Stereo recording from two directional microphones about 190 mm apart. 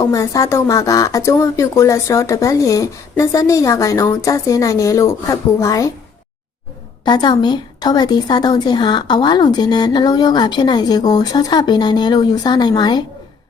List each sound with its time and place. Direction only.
0.0 s speech: 15° left (ahead or behind)
7.0 s a woman's voice: 20° left (ahead or behind)